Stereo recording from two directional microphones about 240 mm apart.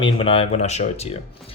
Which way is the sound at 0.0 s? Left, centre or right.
Left.